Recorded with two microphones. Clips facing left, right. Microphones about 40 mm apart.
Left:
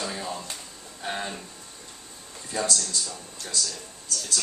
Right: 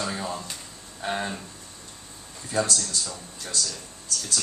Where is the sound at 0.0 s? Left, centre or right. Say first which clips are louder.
Right 2 dB; centre.